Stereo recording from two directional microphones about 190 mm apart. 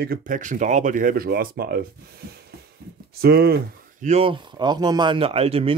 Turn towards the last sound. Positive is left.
turn(degrees=-30)  # may be behind; listen again after turning